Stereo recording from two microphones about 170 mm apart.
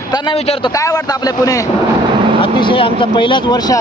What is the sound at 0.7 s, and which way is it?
Speech, 20° left (ahead or behind).